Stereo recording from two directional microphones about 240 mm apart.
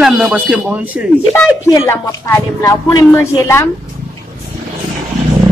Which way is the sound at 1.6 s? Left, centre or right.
Centre.